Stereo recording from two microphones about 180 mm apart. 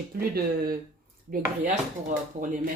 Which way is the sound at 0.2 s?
55° right (ahead or behind).